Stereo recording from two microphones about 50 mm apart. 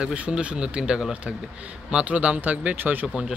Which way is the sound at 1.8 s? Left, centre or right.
Right.